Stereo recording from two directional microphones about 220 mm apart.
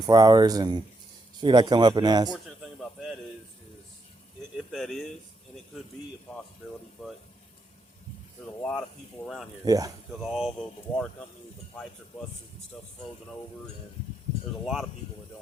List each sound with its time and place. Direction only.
0.1 s a man's voice: 20° right (ahead or behind)
2.3 s a sound: centre (ahead or behind)
4.5 s speech: centre (ahead or behind)
7.0 s speech: centre (ahead or behind)
8.4 s speech: 5° left (ahead or behind)
9.6 s speech: 15° right (ahead or behind)
10.1 s speech: centre (ahead or behind)
14.6 s speech: centre (ahead or behind)